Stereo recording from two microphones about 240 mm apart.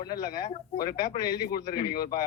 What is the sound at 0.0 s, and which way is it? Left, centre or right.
A man's voice, centre.